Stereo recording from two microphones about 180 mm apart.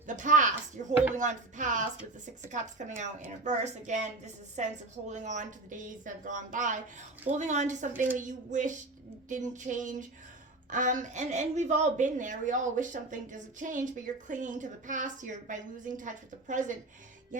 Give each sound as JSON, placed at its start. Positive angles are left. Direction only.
{"t": 0.1, "sound": "a woman's voice", "side_deg": -45}